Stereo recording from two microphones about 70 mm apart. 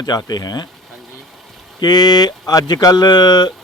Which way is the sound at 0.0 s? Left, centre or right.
Left.